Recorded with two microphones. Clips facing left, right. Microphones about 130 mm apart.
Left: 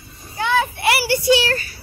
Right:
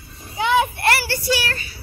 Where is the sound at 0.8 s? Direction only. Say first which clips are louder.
Left 2 dB; 10° left (ahead or behind).